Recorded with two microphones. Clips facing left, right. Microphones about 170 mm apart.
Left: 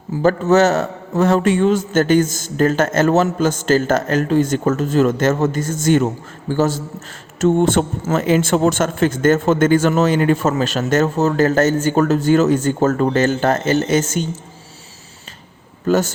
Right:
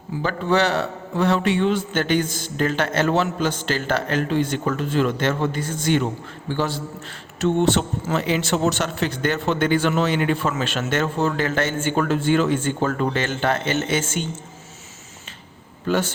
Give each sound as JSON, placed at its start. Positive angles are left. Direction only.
{"t": 0.2, "sound": "a man's voice", "side_deg": 45}
{"t": 15.9, "sound": "speech", "side_deg": 40}